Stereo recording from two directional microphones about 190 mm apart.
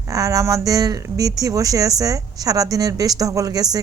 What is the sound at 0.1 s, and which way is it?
A woman's voice, 15° right (ahead or behind).